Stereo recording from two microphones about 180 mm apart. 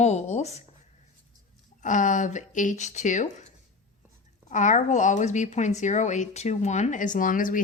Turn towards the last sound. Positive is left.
turn(degrees=50)  # may be behind; listen again after turning